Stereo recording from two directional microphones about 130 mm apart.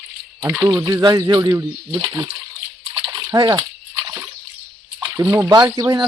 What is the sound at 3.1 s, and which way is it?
Splash, 30° right (ahead or behind).